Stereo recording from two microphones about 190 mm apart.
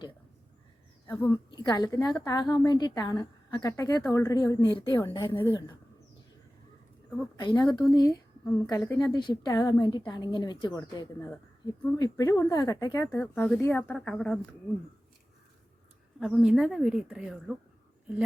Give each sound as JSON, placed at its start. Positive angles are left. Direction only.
{"t": 1.0, "sound": "a woman's voice", "side_deg": 15}
{"t": 7.2, "sound": "a woman's voice", "side_deg": 20}
{"t": 16.2, "sound": "a woman's voice", "side_deg": -5}